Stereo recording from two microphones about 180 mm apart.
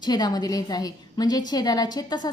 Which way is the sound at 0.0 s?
20° left (ahead or behind).